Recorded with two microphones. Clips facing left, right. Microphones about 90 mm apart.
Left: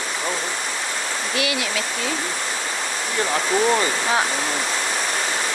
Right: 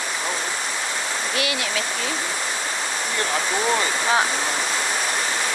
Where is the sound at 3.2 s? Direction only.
Centre (ahead or behind).